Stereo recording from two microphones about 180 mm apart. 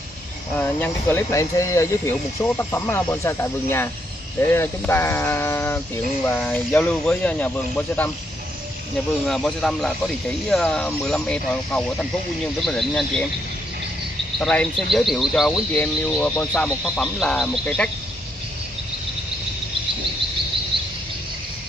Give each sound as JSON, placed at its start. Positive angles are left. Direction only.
{"t": 0.6, "sound": "speech", "side_deg": 10}
{"t": 14.4, "sound": "speech", "side_deg": 5}
{"t": 20.7, "sound": "cricket", "side_deg": -30}